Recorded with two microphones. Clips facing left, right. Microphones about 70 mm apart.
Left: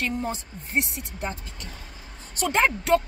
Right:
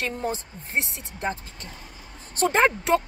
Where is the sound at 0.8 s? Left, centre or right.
Right.